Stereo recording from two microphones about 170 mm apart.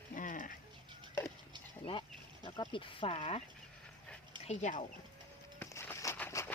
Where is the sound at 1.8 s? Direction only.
30° left (ahead or behind).